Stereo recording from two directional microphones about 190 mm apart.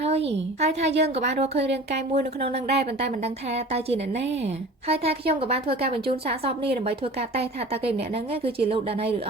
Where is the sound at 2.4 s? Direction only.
35° right (ahead or behind).